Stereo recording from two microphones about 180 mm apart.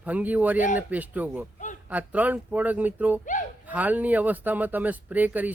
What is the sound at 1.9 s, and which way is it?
Speech, 10° right (ahead or behind).